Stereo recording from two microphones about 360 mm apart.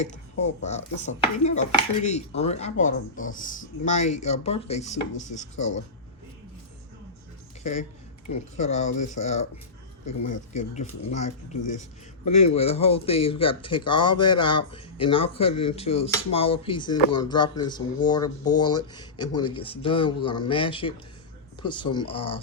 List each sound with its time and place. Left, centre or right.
0.6 s dishes: centre
7.6 s speech: centre
8.3 s dishes: centre
10.5 s speech: centre